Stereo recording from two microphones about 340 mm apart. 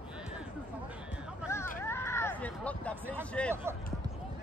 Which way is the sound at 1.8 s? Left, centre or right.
Centre.